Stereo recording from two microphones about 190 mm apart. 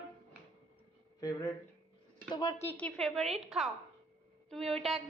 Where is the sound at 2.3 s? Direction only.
20° left (ahead or behind).